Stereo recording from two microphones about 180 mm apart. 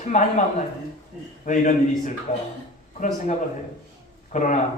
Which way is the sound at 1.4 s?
45° left (ahead or behind).